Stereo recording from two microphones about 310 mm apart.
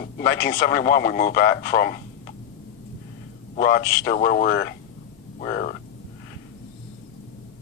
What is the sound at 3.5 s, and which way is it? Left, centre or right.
A man's voice, left.